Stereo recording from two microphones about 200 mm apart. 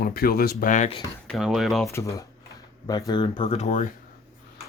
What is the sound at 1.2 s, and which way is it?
Speech, centre (ahead or behind).